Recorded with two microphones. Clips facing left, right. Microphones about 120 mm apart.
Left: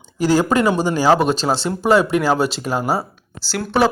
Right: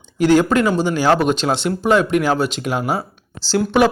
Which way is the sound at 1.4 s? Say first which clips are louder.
Even; 5° left (ahead or behind).